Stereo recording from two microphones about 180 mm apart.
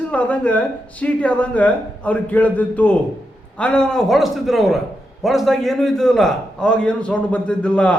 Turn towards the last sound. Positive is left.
turn(degrees=5)  # may be behind; listen again after turning